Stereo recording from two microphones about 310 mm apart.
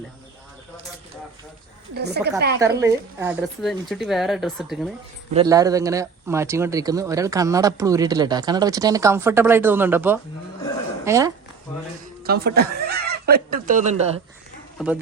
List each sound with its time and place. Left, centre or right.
1.9 s speech: right
2.6 s speech: centre
5.3 s speech: centre
12.2 s speech: right
14.8 s speech: centre